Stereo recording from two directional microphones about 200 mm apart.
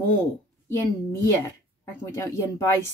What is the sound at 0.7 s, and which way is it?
Speech, 15° left (ahead or behind).